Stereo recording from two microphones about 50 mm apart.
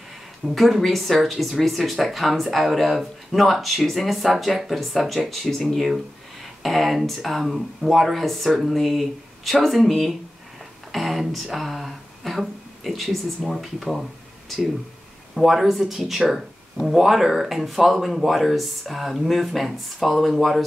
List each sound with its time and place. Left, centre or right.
0.6 s speech: centre
15.3 s speech: centre